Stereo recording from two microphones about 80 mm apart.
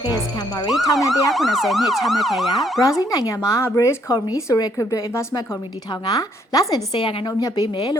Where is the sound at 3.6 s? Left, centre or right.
Left.